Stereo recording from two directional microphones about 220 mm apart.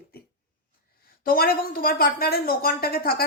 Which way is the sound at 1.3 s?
40° left (ahead or behind).